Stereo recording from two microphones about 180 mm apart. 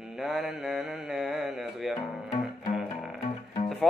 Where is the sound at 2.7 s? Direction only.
Centre (ahead or behind).